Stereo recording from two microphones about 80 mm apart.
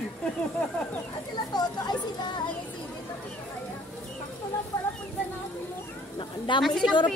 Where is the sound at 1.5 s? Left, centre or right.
Left.